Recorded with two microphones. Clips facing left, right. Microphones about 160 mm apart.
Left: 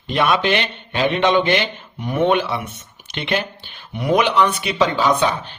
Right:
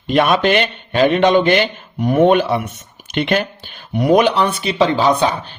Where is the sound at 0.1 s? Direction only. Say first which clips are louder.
Right 4 dB; 50° right (ahead or behind).